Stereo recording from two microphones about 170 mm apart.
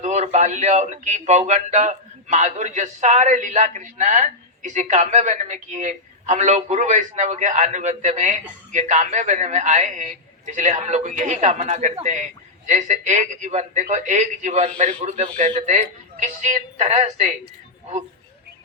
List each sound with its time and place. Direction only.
0.0 s speech: 40° right (ahead or behind)